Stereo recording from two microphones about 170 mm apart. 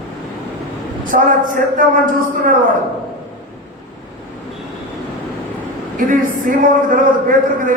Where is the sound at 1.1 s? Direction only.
50° right (ahead or behind).